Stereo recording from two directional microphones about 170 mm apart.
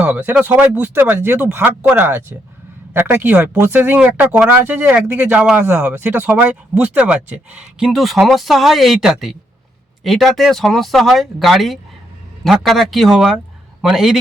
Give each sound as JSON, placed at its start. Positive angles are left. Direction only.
{"t": 0.0, "sound": "speech", "side_deg": -5}